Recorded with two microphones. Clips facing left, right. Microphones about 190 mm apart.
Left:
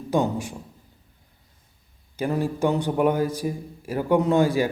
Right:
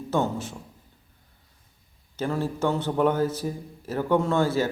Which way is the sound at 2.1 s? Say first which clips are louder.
Left 3 dB; 15° left (ahead or behind).